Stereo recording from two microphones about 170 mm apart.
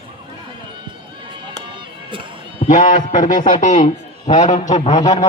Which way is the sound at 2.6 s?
50° left (ahead or behind).